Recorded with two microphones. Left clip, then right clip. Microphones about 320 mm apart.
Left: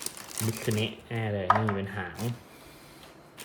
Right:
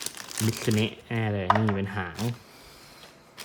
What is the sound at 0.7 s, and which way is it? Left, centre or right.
Speech, right.